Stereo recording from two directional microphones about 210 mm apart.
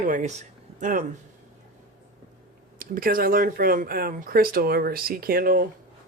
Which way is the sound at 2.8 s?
40° right (ahead or behind).